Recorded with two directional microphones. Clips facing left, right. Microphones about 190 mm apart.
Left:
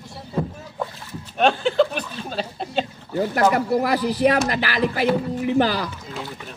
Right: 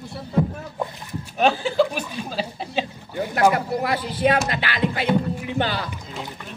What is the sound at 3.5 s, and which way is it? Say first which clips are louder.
Speech: left 3 dB; 40° left (ahead or behind).